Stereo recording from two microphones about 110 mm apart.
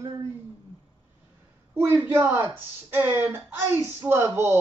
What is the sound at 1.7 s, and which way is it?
Speech, 20° right (ahead or behind).